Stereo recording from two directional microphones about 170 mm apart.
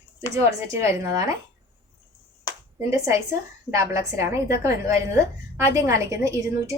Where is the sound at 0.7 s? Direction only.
20° right (ahead or behind).